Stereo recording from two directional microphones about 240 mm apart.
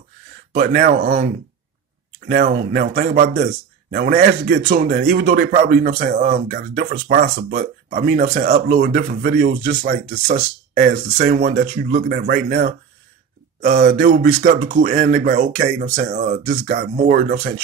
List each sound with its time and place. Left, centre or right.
0.5 s speech: right